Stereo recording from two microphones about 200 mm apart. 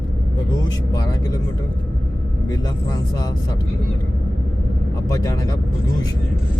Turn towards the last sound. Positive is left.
turn(degrees=15)  # may be behind; listen again after turning